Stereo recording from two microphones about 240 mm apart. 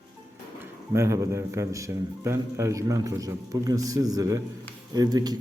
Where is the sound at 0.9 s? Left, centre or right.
Centre.